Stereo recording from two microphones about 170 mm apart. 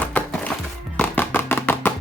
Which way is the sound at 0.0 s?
10° left (ahead or behind).